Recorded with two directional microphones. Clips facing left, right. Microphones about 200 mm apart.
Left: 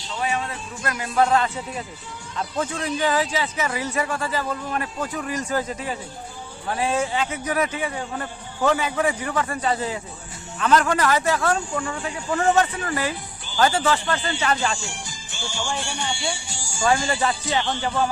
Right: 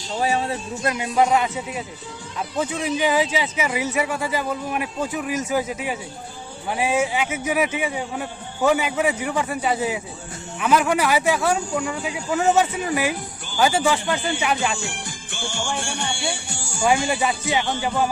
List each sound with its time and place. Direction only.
0.1 s speech: 35° right (ahead or behind); by 14.8 s 10° right (ahead or behind)
14.8 s music: 60° right (ahead or behind)
15.7 s speech: 55° right (ahead or behind)
17.1 s speech: 10° right (ahead or behind)